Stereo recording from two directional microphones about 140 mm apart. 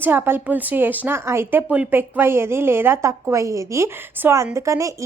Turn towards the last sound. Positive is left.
turn(degrees=-20)  # may be behind; listen again after turning